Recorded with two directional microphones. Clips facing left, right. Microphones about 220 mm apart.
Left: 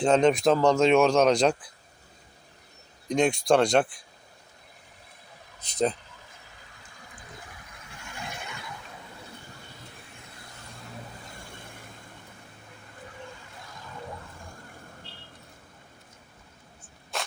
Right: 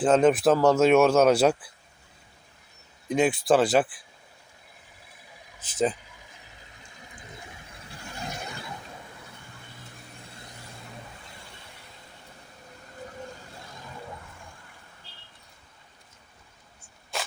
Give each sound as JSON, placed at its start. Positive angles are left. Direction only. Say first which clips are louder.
{"t": 0.0, "sound": "speech", "louder": "right 1 dB", "side_deg": -5}
{"t": 3.1, "sound": "speech", "louder": "even", "side_deg": -5}
{"t": 5.5, "sound": "speech", "louder": "even", "side_deg": -5}
{"t": 7.9, "sound": "a sound", "louder": "right 3 dB", "side_deg": -35}
{"t": 11.5, "sound": "vehicle", "louder": "left 4 dB", "side_deg": 50}
{"t": 17.1, "sound": "a sound", "louder": "even", "side_deg": 0}